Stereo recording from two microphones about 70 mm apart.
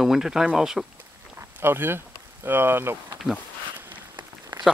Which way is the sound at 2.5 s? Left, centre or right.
Right.